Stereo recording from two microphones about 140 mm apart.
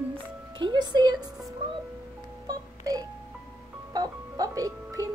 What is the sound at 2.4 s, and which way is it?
Music, 25° right (ahead or behind).